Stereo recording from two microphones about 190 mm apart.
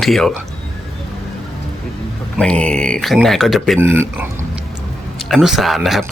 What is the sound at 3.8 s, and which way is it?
Speech, 10° right (ahead or behind).